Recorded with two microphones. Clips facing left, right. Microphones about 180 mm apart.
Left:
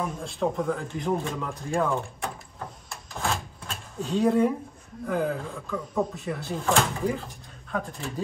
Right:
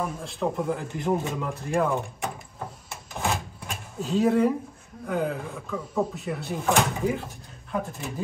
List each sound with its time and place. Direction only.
0.0 s speech: centre (ahead or behind)
3.2 s a sound: 15° right (ahead or behind)
4.0 s speech: 5° right (ahead or behind)